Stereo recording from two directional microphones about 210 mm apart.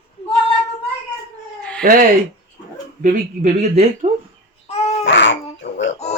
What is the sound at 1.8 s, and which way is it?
Speech, 40° right (ahead or behind).